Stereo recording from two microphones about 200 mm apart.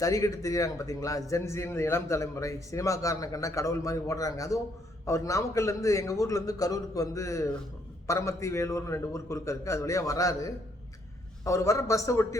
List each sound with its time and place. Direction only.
0.0 s a man's voice: 15° left (ahead or behind)